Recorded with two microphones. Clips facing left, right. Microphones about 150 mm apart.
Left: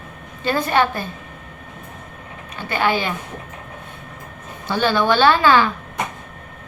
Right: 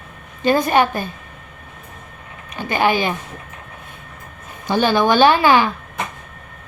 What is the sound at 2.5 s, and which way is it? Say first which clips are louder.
Speech: right 3 dB; 15° right (ahead or behind).